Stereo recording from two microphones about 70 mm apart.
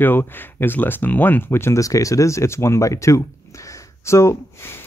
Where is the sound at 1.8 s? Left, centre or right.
Left.